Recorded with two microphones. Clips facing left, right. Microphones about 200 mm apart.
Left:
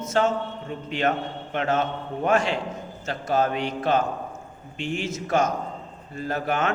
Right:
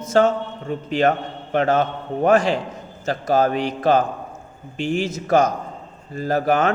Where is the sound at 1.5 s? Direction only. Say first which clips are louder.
Right 6 dB; 35° right (ahead or behind).